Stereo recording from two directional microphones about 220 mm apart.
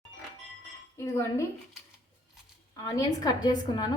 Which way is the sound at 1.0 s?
10° left (ahead or behind).